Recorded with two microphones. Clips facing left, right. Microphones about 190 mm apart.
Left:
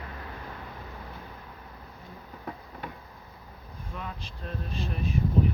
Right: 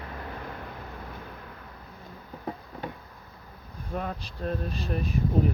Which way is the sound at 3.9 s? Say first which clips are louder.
Right 7 dB; 45° right (ahead or behind).